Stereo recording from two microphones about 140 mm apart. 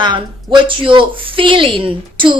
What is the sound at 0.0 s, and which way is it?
Speech, 35° right (ahead or behind).